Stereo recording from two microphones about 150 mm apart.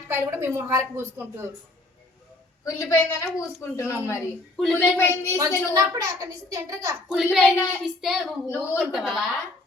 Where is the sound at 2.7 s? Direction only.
20° left (ahead or behind).